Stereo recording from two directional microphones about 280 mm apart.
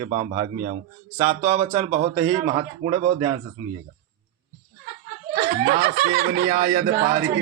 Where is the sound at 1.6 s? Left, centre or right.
Centre.